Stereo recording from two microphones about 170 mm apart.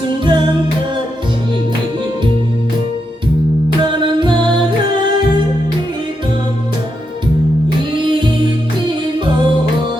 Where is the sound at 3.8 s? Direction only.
30° right (ahead or behind).